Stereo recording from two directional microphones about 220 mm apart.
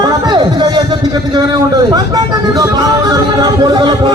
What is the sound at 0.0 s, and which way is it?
Speech, 20° right (ahead or behind).